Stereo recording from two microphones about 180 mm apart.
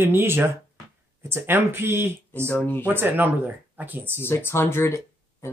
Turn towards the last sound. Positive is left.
turn(degrees=15)  # may be behind; listen again after turning